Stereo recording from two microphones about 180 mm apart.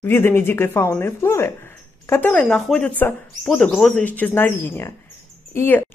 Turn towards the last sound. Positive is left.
turn(degrees=10)  # may be behind; listen again after turning